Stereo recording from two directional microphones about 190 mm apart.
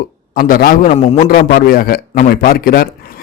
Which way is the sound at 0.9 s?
35° left (ahead or behind).